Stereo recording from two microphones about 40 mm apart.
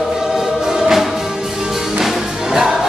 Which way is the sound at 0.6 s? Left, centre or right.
Centre.